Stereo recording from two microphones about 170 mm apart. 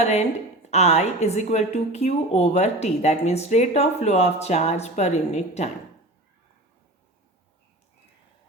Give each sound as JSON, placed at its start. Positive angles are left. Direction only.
{"t": 0.0, "sound": "a woman's voice", "side_deg": 40}